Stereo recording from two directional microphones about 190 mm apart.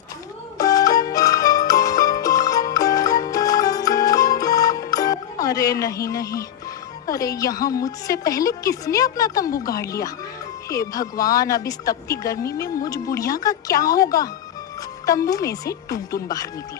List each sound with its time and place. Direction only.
0.6 s music: 20° left (ahead or behind)
7.1 s speech: 20° left (ahead or behind)